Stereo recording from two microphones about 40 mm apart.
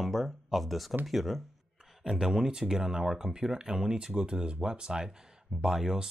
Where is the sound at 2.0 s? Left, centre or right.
Centre.